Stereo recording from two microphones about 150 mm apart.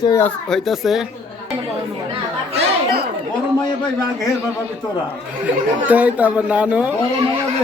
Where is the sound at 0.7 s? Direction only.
Centre (ahead or behind).